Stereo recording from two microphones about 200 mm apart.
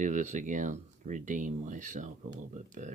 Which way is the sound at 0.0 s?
35° right (ahead or behind).